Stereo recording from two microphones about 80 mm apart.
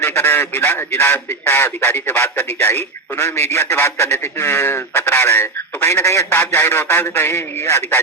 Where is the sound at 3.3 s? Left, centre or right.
Left.